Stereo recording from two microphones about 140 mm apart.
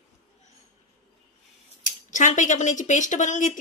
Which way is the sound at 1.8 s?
65° left (ahead or behind).